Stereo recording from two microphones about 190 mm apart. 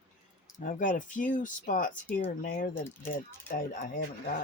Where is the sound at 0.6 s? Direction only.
45° left (ahead or behind).